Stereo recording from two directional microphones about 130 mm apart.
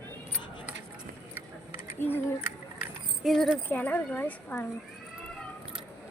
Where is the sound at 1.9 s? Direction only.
15° left (ahead or behind).